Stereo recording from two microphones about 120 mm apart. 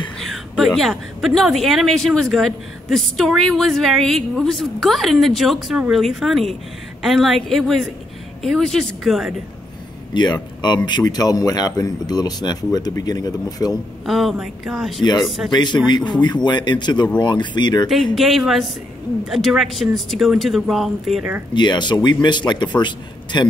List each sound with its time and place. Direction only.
0.2 s a woman's voice: centre (ahead or behind)
10.1 s speech: 35° left (ahead or behind)
14.0 s a woman's voice: centre (ahead or behind)
15.5 s speech: 40° left (ahead or behind)
18.1 s a woman's voice: centre (ahead or behind)
21.5 s speech: 40° left (ahead or behind)